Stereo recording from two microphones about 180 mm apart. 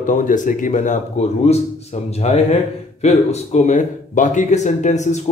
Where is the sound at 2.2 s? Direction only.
40° left (ahead or behind).